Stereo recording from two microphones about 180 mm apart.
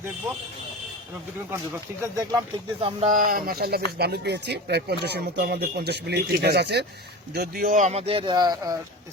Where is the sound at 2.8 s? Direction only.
40° right (ahead or behind); by 8.7 s 25° right (ahead or behind).